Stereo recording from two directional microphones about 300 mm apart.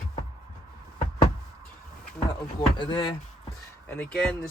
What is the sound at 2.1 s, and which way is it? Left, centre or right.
Speech, centre.